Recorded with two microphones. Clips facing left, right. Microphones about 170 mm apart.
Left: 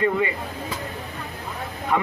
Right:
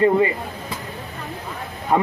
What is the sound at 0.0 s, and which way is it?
Speech, 35° right (ahead or behind).